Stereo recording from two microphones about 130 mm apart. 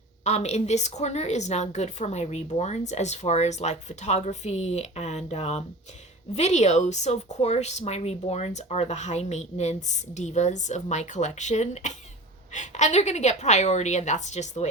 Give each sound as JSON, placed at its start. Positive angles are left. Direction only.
{"t": 0.3, "sound": "a woman's voice", "side_deg": 60}